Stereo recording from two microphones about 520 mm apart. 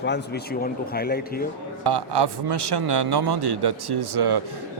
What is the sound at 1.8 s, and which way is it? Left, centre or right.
Speech, right.